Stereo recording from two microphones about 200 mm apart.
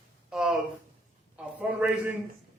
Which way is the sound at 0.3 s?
Centre (ahead or behind).